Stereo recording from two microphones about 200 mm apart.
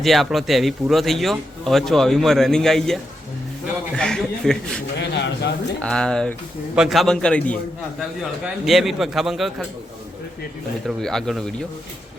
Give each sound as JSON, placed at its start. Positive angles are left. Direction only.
{"t": 0.0, "sound": "speech", "side_deg": 0}
{"t": 4.9, "sound": "speech", "side_deg": 55}
{"t": 5.8, "sound": "speech", "side_deg": 5}
{"t": 8.6, "sound": "speech", "side_deg": 0}
{"t": 10.8, "sound": "speech", "side_deg": 0}